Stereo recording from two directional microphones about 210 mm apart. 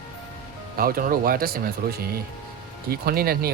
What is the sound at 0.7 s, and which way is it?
Speech, 45° right (ahead or behind).